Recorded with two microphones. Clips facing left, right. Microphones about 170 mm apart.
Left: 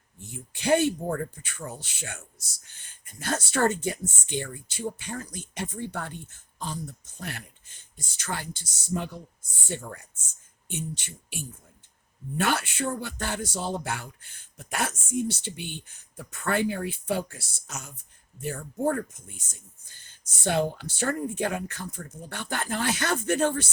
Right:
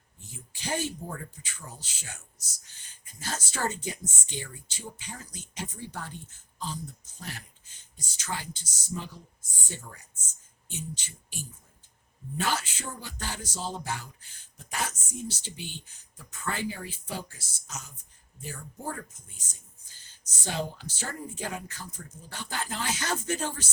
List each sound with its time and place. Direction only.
0.3 s speech: 60° left (ahead or behind)